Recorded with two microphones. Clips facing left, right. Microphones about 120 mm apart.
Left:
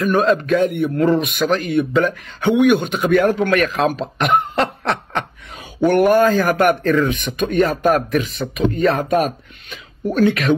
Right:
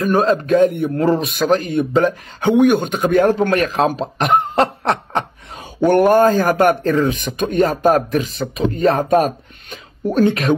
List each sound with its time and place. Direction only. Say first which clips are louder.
0.0 s speech: even; 35° right (ahead or behind)